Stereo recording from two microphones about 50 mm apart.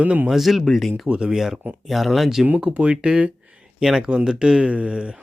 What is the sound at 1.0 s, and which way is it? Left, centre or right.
Speech, centre.